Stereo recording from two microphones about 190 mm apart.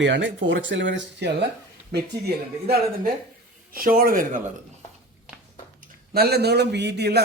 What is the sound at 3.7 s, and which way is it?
Speech, 50° right (ahead or behind).